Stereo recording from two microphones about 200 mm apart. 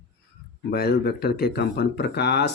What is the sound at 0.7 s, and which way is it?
Speech, 55° left (ahead or behind).